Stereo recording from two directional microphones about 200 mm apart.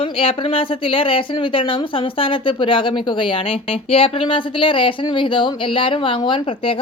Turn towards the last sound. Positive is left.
turn(degrees=25)  # may be behind; listen again after turning